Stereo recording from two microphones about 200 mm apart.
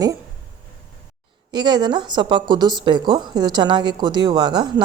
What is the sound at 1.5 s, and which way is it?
A woman's voice, 20° right (ahead or behind).